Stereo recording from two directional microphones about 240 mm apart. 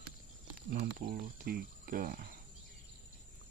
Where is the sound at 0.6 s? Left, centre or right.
Right.